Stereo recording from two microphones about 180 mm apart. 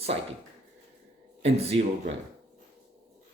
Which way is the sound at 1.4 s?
35° right (ahead or behind).